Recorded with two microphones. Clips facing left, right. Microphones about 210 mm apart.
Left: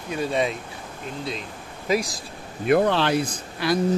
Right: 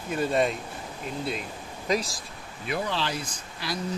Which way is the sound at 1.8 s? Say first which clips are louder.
Left 4 dB; 5° left (ahead or behind).